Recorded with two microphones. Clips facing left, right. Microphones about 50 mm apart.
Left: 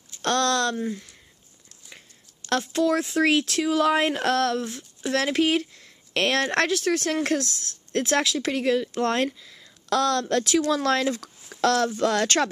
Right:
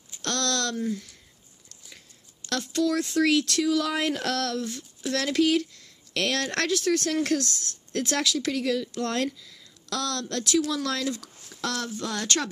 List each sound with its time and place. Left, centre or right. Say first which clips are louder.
0.2 s speech: left 6 dB; left
2.6 s speech: left 1 dB; left
11.6 s speech: left 9 dB; left